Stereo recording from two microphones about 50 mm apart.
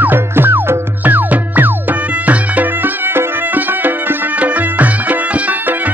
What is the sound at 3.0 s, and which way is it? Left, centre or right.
Music, right.